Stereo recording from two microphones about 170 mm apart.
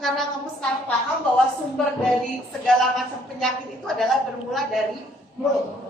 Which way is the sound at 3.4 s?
Centre (ahead or behind).